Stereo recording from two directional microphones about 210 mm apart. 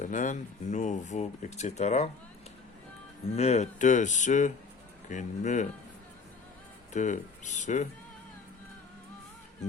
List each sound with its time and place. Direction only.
0.0 s speech: 35° left (ahead or behind)
3.3 s speech: 30° left (ahead or behind)
6.9 s speech: 35° left (ahead or behind)